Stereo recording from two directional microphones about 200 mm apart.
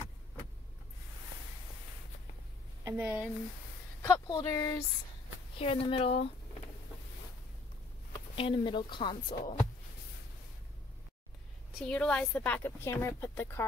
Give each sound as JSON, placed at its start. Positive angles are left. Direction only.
{"t": 2.8, "sound": "a woman's voice", "side_deg": -10}
{"t": 4.3, "sound": "a woman's voice", "side_deg": 15}
{"t": 5.6, "sound": "a woman's voice", "side_deg": 30}
{"t": 8.4, "sound": "a woman's voice", "side_deg": 25}
{"t": 11.8, "sound": "a woman's voice", "side_deg": 5}